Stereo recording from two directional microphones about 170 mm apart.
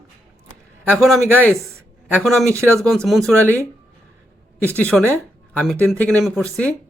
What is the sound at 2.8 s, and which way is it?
Speech, centre (ahead or behind).